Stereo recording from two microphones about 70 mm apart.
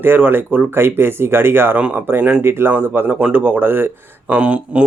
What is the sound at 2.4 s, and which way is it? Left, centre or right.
Speech, right.